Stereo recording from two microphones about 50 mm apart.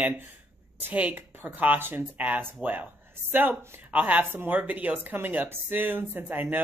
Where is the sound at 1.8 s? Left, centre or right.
Right.